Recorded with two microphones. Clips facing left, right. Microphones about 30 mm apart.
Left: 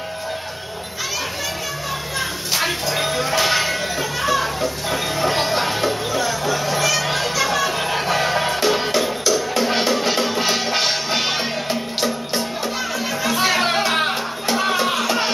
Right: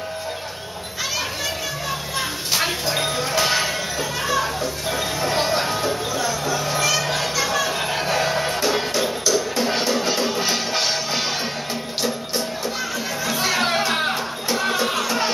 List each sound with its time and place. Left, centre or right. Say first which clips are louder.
2.1 s a sound: even; centre
4.2 s music: left 3 dB; centre
5.5 s music: left 1 dB; centre
5.8 s music: left 2 dB; left
7.3 s music: left 2 dB; centre
9.8 s music: left 2 dB; left
13.3 s music: left 2 dB; centre